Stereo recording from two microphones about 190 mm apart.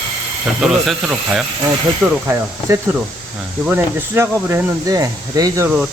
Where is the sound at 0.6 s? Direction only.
Centre (ahead or behind).